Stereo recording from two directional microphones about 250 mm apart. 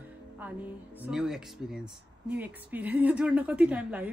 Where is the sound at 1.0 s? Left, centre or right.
Centre.